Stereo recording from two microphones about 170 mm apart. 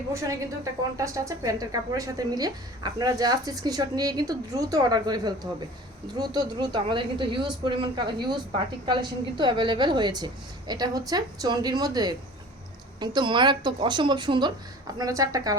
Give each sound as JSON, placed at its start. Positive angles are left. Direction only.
{"t": 0.1, "sound": "speech", "side_deg": -20}